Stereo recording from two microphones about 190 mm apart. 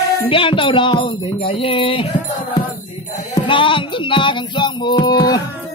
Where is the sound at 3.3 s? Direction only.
25° left (ahead or behind).